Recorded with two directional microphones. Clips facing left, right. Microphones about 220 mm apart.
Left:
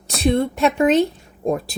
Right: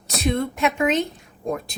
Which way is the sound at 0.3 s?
35° left (ahead or behind).